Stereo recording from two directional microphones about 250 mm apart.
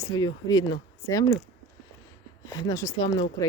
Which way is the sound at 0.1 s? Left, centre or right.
Centre.